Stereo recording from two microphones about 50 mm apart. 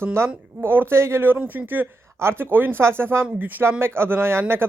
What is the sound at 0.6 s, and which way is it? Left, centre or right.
Speech, right.